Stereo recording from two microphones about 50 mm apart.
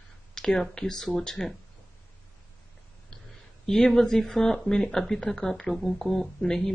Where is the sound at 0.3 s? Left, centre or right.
Centre.